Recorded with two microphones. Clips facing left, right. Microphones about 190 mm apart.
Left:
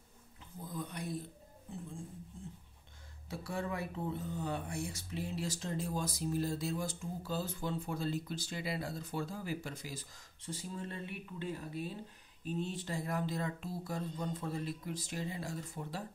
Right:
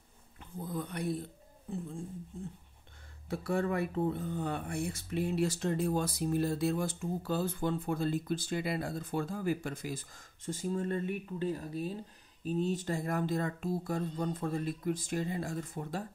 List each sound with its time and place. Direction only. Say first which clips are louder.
0.4 s speech: right 5 dB; 60° right (ahead or behind)
3.3 s speech: right 7 dB; 55° right (ahead or behind)